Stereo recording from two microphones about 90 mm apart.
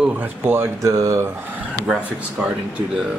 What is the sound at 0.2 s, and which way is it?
Speech, 25° right (ahead or behind).